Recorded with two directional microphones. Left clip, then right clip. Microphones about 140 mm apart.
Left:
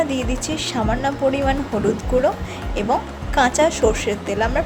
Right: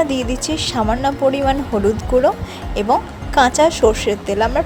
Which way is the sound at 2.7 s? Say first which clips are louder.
Right 4 dB; 40° right (ahead or behind).